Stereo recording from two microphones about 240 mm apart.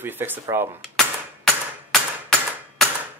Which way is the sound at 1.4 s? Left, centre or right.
Centre.